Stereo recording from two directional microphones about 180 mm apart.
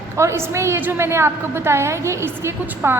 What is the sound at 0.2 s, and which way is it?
A woman's voice, 15° right (ahead or behind).